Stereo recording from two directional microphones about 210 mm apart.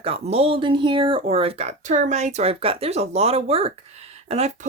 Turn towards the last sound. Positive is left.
turn(degrees=-30)  # may be behind; listen again after turning